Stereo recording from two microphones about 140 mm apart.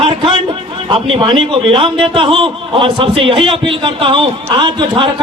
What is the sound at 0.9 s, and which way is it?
A man's voice, 40° right (ahead or behind).